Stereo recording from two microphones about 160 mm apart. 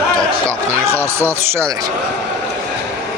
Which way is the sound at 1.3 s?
20° right (ahead or behind).